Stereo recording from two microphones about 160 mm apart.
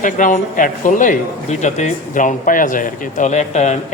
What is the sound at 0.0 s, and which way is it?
Speech, 50° left (ahead or behind).